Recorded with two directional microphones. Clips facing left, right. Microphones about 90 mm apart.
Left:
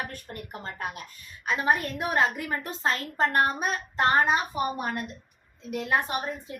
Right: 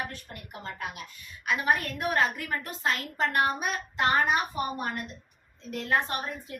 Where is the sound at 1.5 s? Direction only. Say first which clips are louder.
Left 2 dB; 25° left (ahead or behind).